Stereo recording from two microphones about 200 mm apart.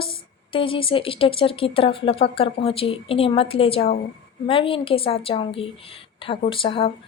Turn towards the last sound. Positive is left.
turn(degrees=25)  # may be behind; listen again after turning